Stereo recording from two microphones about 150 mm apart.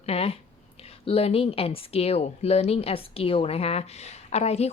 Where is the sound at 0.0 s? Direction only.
40° left (ahead or behind).